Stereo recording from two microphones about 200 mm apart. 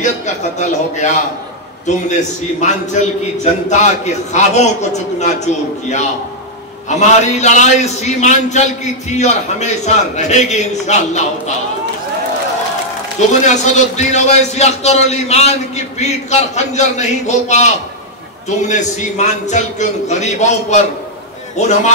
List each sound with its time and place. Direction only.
0.0 s a man's voice: 35° left (ahead or behind)
2.6 s a man's voice: 35° left (ahead or behind)
13.3 s a man's voice: 35° left (ahead or behind)
18.7 s a man's voice: 35° left (ahead or behind)